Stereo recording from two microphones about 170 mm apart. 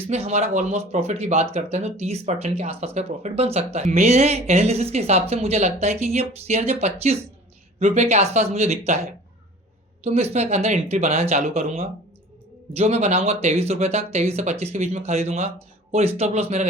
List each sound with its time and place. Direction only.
0.1 s speech: 40° right (ahead or behind)
10.0 s speech: 40° right (ahead or behind)